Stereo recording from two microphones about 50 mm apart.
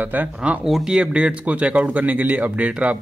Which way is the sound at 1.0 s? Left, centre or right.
Right.